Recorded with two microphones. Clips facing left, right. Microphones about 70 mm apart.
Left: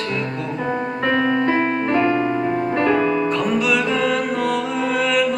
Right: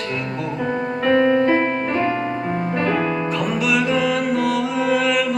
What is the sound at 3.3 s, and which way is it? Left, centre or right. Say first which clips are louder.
Music: left 2 dB; centre.